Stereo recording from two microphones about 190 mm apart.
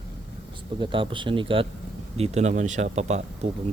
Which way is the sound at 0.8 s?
25° right (ahead or behind).